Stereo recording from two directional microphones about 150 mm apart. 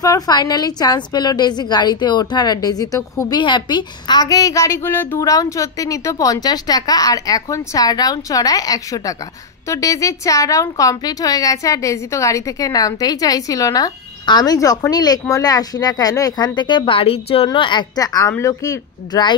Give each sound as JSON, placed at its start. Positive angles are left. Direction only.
{"t": 0.0, "sound": "a woman's voice", "side_deg": 25}